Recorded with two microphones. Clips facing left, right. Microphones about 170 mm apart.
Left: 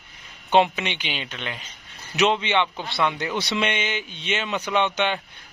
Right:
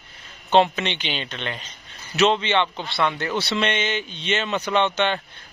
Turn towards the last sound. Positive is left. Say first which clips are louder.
# right 2 dB
turn(degrees=10)  # may be behind; listen again after turning